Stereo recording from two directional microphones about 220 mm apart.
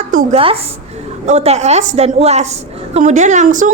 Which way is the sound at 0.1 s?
40° right (ahead or behind).